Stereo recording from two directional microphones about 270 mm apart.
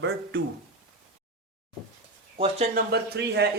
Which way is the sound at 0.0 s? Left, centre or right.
Right.